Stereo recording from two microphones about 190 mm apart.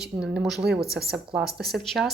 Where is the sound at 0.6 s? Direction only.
55° right (ahead or behind).